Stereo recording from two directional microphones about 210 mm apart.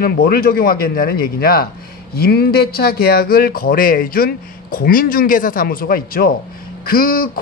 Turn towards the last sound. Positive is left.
turn(degrees=45)  # may be behind; listen again after turning